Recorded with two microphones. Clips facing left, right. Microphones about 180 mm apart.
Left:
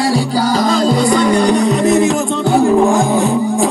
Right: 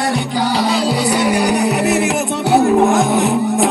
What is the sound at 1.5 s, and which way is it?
Music, 70° right (ahead or behind).